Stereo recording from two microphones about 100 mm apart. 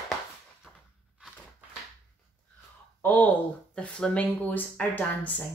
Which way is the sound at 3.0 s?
20° left (ahead or behind).